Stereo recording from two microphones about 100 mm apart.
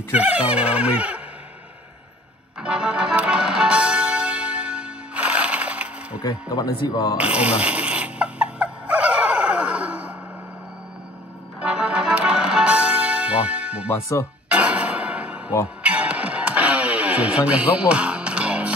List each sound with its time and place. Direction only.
0.1 s a sound: 15° right (ahead or behind)
2.6 s music: 10° right (ahead or behind)
6.2 s speech: 40° left (ahead or behind)
7.2 s snoring: 10° right (ahead or behind)
11.6 s music: 10° right (ahead or behind)
13.8 s speech: 25° left (ahead or behind)
14.5 s music: 15° right (ahead or behind)